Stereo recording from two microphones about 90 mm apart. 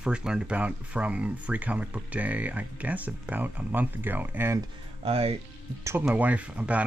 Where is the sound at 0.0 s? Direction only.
10° right (ahead or behind).